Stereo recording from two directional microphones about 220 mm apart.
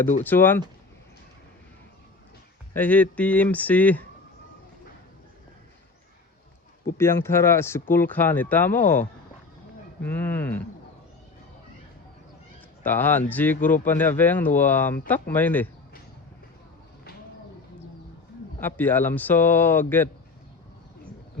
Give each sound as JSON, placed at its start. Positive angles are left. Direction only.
{"t": 0.3, "sound": "speech", "side_deg": 10}
{"t": 2.7, "sound": "speech", "side_deg": 5}
{"t": 6.9, "sound": "speech", "side_deg": 10}
{"t": 10.0, "sound": "speech", "side_deg": 10}
{"t": 12.8, "sound": "speech", "side_deg": 10}
{"t": 18.6, "sound": "speech", "side_deg": 10}